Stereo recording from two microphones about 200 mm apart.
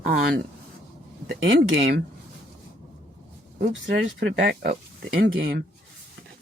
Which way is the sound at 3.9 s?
60° right (ahead or behind).